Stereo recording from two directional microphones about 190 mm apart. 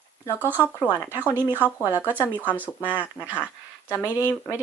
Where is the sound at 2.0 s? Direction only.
10° left (ahead or behind).